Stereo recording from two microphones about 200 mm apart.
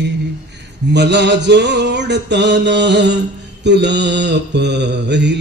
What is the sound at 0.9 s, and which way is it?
Music, 60° right (ahead or behind).